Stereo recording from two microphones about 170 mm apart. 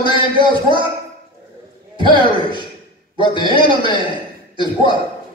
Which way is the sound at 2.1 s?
30° left (ahead or behind).